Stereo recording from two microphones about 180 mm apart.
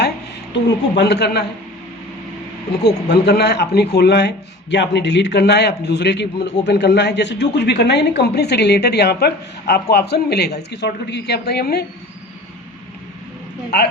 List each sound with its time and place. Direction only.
0.9 s speech: 65° left (ahead or behind)
2.8 s a woman's voice: 65° left (ahead or behind)
13.7 s speech: 65° left (ahead or behind)